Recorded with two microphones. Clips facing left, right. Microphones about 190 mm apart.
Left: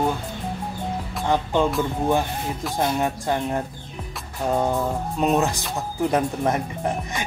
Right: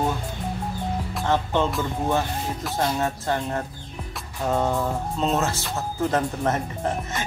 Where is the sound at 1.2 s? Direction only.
15° left (ahead or behind).